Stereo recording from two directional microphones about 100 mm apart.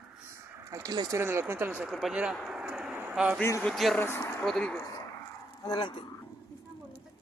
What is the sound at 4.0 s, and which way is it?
Speech, 25° left (ahead or behind).